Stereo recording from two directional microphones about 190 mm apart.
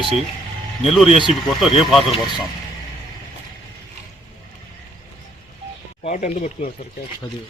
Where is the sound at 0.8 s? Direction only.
Centre (ahead or behind).